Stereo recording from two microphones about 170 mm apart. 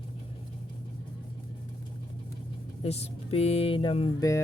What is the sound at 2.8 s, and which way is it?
Speech, 35° left (ahead or behind).